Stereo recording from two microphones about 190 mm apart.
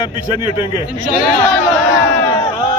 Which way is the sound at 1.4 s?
10° left (ahead or behind).